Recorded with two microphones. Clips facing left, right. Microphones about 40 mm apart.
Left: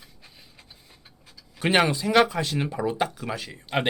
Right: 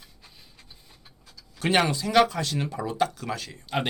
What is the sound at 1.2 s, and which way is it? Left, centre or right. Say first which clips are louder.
Speech: left 1 dB; centre.